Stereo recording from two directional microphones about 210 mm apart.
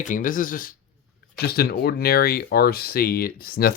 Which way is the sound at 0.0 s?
40° left (ahead or behind).